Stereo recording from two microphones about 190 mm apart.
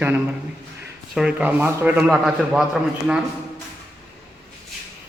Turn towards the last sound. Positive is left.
turn(degrees=-5)  # may be behind; listen again after turning